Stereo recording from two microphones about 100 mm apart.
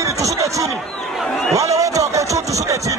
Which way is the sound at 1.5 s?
35° right (ahead or behind).